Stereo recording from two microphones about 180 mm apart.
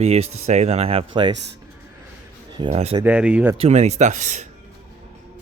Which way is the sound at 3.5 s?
35° right (ahead or behind).